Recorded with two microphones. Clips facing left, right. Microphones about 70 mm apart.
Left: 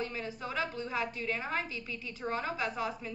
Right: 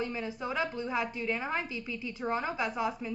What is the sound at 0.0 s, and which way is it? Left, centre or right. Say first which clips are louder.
A woman's voice: right 3 dB; centre.